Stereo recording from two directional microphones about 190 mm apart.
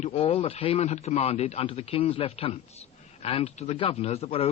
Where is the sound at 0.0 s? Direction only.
30° left (ahead or behind).